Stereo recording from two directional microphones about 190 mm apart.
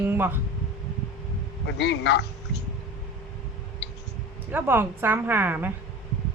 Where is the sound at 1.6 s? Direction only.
65° left (ahead or behind).